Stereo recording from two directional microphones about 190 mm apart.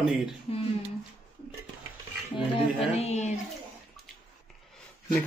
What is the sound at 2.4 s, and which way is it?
Speech, 30° left (ahead or behind).